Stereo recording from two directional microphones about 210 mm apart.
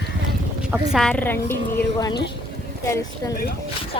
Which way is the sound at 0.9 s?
5° left (ahead or behind).